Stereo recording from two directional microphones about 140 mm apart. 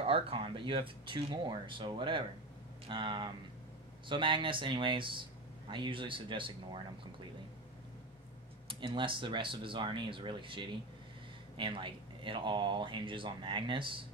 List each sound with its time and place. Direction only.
0.0 s speech: 40° right (ahead or behind)
8.6 s speech: 35° right (ahead or behind)